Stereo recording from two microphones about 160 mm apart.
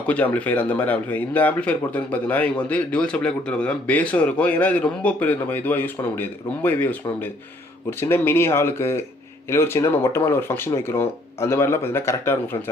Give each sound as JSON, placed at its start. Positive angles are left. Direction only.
{"t": 0.1, "sound": "speech", "side_deg": 10}